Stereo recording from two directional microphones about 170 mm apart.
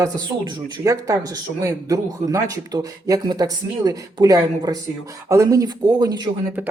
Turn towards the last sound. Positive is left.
turn(degrees=-10)  # may be behind; listen again after turning